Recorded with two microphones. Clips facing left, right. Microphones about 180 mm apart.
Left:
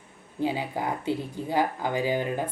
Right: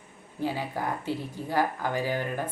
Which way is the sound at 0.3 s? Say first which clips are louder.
Left 2 dB; 20° left (ahead or behind).